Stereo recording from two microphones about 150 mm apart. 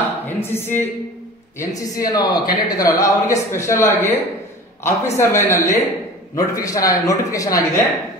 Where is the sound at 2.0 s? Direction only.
25° left (ahead or behind).